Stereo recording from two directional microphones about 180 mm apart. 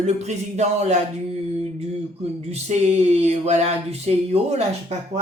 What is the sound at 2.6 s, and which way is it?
Speech, 35° right (ahead or behind).